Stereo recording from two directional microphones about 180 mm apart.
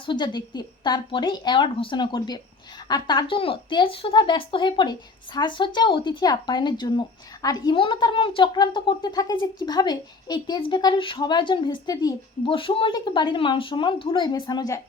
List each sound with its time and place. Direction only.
0.0 s speech: 25° left (ahead or behind)